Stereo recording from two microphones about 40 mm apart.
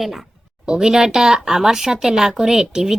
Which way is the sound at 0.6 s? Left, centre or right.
Centre.